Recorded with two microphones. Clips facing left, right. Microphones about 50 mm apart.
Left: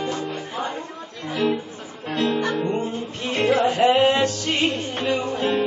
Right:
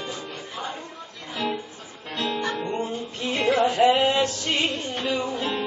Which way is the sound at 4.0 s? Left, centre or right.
Left.